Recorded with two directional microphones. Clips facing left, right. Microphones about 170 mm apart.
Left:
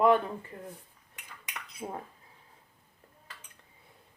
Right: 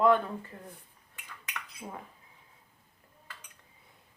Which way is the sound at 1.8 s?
25° left (ahead or behind).